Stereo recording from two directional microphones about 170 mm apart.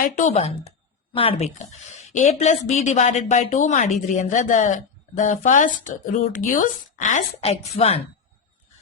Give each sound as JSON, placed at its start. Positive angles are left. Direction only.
{"t": 0.0, "sound": "a woman's voice", "side_deg": 45}